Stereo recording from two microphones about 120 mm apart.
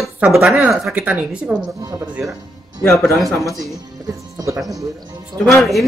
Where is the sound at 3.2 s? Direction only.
25° right (ahead or behind).